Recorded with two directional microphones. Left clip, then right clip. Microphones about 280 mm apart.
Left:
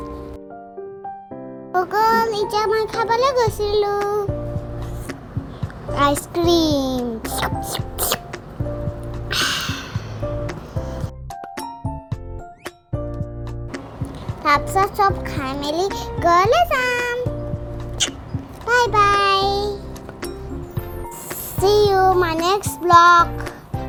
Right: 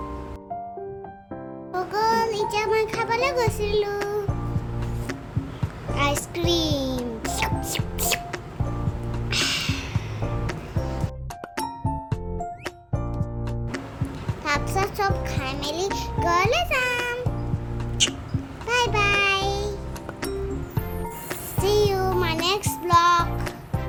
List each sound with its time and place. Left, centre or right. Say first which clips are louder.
1.7 s music: left 6 dB; left
3.0 s a child's voice: left 6 dB; centre
6.0 s a child's voice: left 7 dB; left
7.3 s music: left 3 dB; centre
9.3 s music: left 4 dB; left
14.4 s child singing: left 8 dB; centre
14.9 s music: left 7 dB; centre
16.0 s a child's voice: left 7 dB; left
18.0 s music: even; left
18.7 s child singing: left 6 dB; centre
21.6 s child singing: left 7 dB; left
22.4 s music: left 6 dB; centre